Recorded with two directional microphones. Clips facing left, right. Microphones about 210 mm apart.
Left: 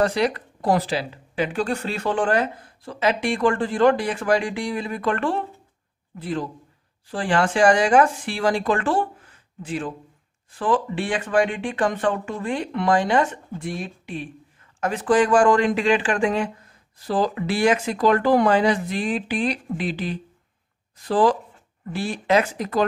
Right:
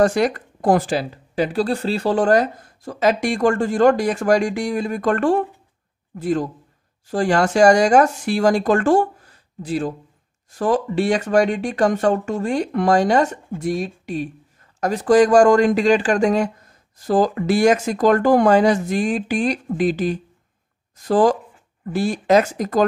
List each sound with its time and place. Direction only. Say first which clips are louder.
0.0 s speech: right 4 dB; 45° right (ahead or behind)